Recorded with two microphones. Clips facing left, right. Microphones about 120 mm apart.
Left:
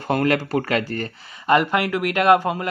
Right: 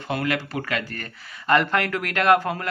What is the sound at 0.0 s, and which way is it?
Speech, 45° left (ahead or behind).